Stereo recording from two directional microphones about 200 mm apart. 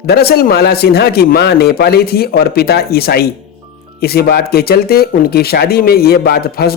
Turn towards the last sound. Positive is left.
turn(degrees=50)  # may be behind; listen again after turning